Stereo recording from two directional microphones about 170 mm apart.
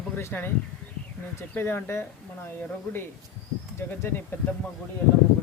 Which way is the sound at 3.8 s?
15° left (ahead or behind).